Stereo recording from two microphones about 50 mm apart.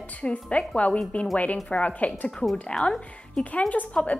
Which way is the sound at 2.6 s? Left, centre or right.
Centre.